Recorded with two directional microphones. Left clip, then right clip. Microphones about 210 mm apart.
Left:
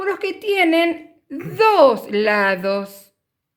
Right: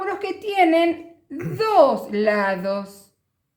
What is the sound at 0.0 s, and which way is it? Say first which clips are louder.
A woman's voice: left 4 dB; 50° left (ahead or behind).